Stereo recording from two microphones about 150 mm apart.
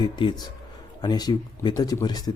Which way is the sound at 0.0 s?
30° left (ahead or behind).